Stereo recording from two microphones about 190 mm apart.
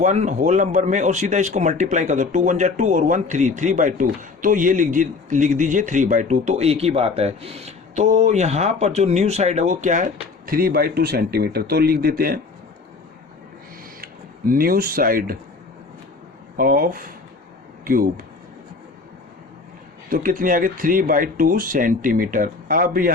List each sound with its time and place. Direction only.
0.0 s speech: 40° right (ahead or behind)
14.0 s speech: 50° right (ahead or behind)
16.6 s speech: 50° right (ahead or behind)
20.1 s speech: 45° right (ahead or behind)